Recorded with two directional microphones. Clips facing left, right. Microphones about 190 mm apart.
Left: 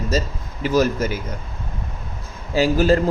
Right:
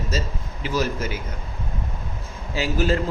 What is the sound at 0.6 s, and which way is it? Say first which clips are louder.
Speech: left 6 dB; 45° left (ahead or behind).